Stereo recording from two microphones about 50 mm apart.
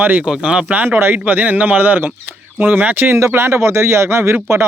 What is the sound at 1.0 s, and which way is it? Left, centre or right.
A man's voice, right.